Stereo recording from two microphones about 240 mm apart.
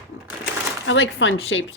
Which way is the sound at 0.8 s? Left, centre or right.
Left.